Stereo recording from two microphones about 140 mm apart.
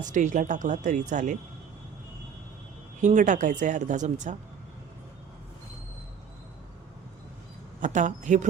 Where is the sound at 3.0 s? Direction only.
65° right (ahead or behind).